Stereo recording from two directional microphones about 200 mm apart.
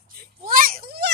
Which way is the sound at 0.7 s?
50° right (ahead or behind).